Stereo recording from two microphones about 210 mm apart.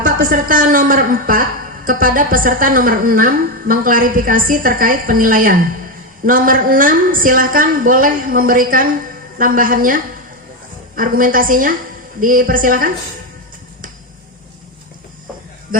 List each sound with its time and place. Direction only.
0.0 s speech: 40° right (ahead or behind)